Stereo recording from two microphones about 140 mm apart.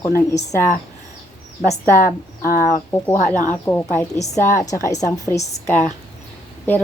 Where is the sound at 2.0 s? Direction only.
90° left.